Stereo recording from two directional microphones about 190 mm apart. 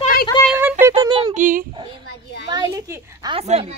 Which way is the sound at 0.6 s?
10° right (ahead or behind).